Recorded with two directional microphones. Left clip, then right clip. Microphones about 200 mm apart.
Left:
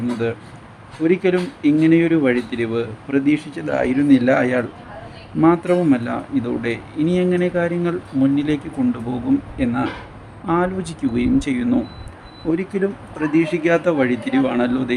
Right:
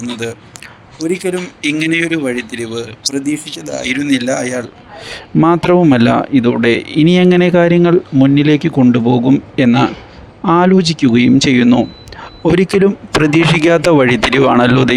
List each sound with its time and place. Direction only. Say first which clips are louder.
0.1 s speech: right 1 dB; centre (ahead or behind)
1.6 s speech: right 1 dB; 50° right (ahead or behind)
2.0 s speech: right 1 dB; 5° left (ahead or behind)
3.8 s speech: right 2 dB; 50° right (ahead or behind)
4.3 s speech: even; centre (ahead or behind)
5.4 s speech: right 6 dB; 50° right (ahead or behind)